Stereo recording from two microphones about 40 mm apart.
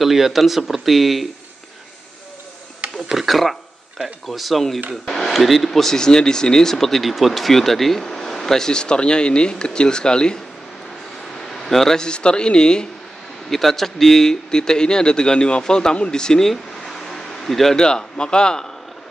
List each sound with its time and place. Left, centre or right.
0.0 s speech: centre
3.1 s speech: centre; by 10.4 s left
11.5 s a man's voice: centre
12.1 s a man's voice: left
13.5 s speech: centre
16.4 s a sound: centre
17.7 s a man's voice: centre